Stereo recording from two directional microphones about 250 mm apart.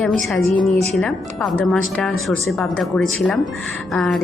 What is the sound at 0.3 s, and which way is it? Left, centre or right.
Speech, centre.